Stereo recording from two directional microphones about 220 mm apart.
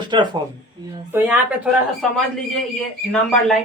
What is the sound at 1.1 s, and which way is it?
Speech, 10° right (ahead or behind).